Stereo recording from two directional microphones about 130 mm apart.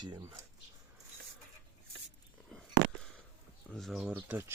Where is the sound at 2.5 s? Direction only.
5° left (ahead or behind).